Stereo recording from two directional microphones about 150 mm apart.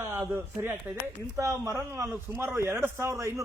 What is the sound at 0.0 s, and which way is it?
A man's voice, 15° right (ahead or behind).